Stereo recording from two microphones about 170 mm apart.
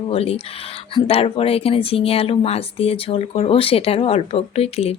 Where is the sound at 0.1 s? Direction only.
35° left (ahead or behind).